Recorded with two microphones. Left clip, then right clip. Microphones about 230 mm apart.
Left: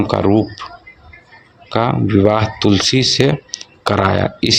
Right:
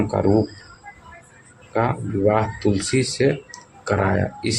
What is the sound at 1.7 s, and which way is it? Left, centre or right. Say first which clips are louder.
Speech: left 7 dB; left.